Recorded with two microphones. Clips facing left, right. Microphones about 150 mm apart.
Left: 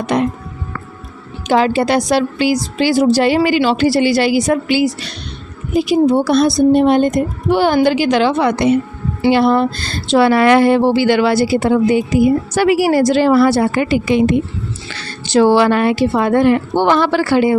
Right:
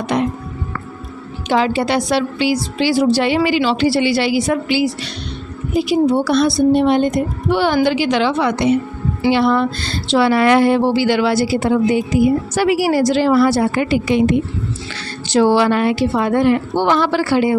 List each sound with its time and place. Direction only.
1.5 s a woman's voice: 45° left (ahead or behind)
9.3 s speech: 40° left (ahead or behind); by 13.8 s 60° left (ahead or behind)
15.3 s speech: 65° left (ahead or behind)